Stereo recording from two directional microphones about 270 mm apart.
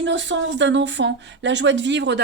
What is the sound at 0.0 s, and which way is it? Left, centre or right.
Speech, right.